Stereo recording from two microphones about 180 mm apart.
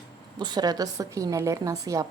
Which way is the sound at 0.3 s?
25° right (ahead or behind).